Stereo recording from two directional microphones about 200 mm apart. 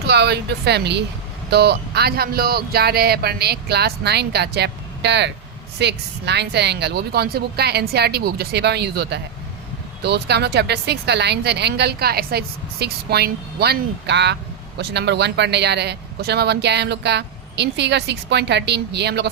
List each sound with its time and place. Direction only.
0.0 s speech: 55° right (ahead or behind)